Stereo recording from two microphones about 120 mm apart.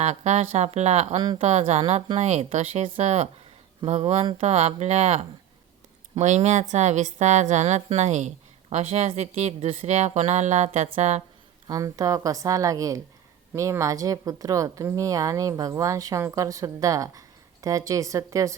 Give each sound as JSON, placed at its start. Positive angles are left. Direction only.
{"t": 0.0, "sound": "speech", "side_deg": -65}
{"t": 6.1, "sound": "a woman's voice", "side_deg": -80}
{"t": 11.7, "sound": "speech", "side_deg": -30}